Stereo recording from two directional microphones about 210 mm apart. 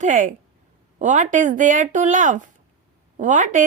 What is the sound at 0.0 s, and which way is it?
A woman's voice, 40° right (ahead or behind).